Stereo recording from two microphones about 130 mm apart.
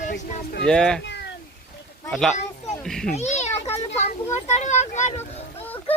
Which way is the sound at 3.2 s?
60° left (ahead or behind).